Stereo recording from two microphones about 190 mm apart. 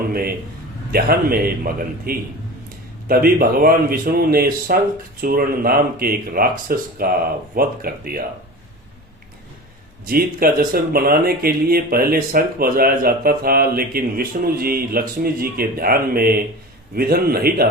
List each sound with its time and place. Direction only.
0.1 s a man's voice: 50° right (ahead or behind)
10.1 s speech: 50° right (ahead or behind)